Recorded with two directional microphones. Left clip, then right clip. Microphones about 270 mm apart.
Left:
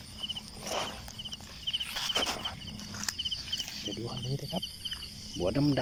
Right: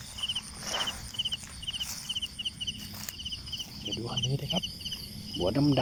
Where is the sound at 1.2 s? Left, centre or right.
Right.